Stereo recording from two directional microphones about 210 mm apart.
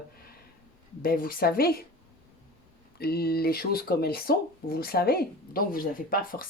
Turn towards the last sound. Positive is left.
turn(degrees=45)  # may be behind; listen again after turning